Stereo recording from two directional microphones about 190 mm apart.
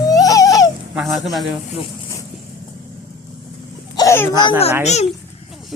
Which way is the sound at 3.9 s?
15° left (ahead or behind).